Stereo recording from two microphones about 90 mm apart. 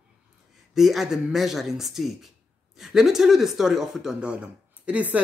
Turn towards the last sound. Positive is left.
turn(degrees=-10)  # may be behind; listen again after turning